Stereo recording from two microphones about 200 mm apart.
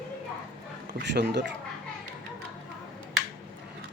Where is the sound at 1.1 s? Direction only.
60° right (ahead or behind).